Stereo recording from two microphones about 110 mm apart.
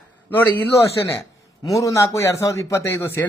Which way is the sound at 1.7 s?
30° left (ahead or behind).